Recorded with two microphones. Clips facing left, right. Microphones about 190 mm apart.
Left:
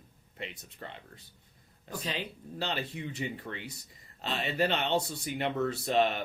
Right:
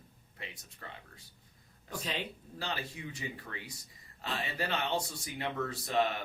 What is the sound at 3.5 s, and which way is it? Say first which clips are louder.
Speech: left 5 dB; 35° left (ahead or behind).